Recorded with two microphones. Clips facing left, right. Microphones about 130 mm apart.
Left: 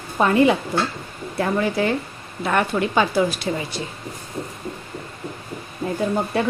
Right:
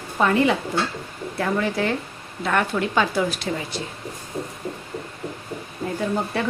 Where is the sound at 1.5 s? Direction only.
10° left (ahead or behind).